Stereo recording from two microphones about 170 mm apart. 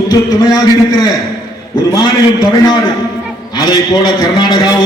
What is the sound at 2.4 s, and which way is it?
A man's voice, 20° left (ahead or behind).